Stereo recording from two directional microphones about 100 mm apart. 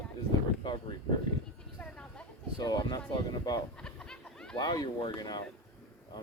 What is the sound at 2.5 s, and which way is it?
Speech, 40° left (ahead or behind).